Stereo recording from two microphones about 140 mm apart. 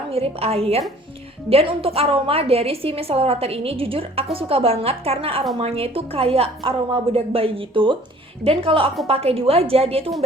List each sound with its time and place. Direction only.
0.1 s a woman's voice: 45° right (ahead or behind)